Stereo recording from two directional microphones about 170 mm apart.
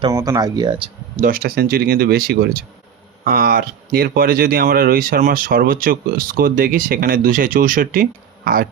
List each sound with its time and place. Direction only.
0.1 s speech: 20° right (ahead or behind)
1.1 s speech: 55° right (ahead or behind)